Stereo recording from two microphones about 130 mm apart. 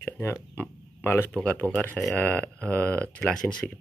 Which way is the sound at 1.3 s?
10° left (ahead or behind).